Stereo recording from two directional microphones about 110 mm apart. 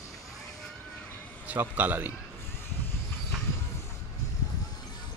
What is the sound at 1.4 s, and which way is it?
Speech, 15° right (ahead or behind).